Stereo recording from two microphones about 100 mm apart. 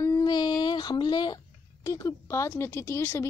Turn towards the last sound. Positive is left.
turn(degrees=25)  # may be behind; listen again after turning